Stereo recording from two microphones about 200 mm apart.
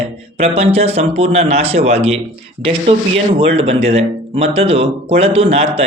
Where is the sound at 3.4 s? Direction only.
30° right (ahead or behind).